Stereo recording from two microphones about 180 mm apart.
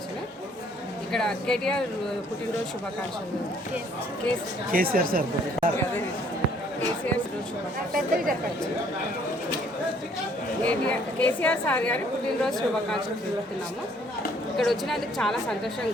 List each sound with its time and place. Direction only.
1.1 s a woman's voice: 5° left (ahead or behind)
4.7 s speech: 55° right (ahead or behind)
7.9 s speech: 50° right (ahead or behind)
10.6 s a woman's voice: 5° left (ahead or behind)
14.5 s a woman's voice: centre (ahead or behind)